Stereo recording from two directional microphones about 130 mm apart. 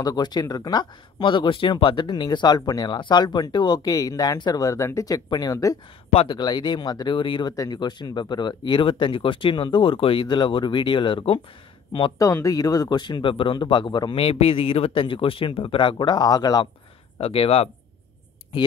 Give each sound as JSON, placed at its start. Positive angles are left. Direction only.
{"t": 0.0, "sound": "speech", "side_deg": 30}
{"t": 6.1, "sound": "speech", "side_deg": 35}
{"t": 12.2, "sound": "speech", "side_deg": 25}
{"t": 14.1, "sound": "speech", "side_deg": 45}
{"t": 17.2, "sound": "speech", "side_deg": 45}